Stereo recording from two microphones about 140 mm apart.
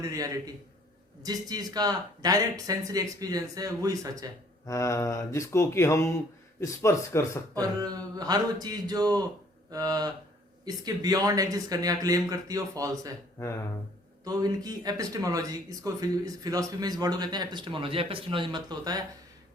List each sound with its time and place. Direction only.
0.0 s speech: 25° right (ahead or behind)
4.6 s speech: 20° left (ahead or behind)
7.6 s speech: 25° right (ahead or behind)
14.3 s speech: 25° right (ahead or behind)